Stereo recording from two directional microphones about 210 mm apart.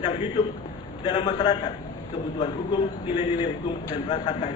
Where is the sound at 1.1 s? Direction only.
20° left (ahead or behind).